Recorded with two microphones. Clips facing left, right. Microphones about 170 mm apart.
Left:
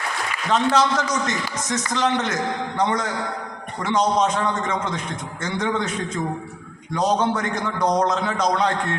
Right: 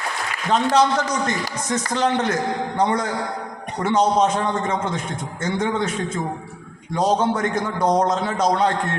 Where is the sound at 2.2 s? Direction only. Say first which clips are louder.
Right 3 dB; 30° right (ahead or behind).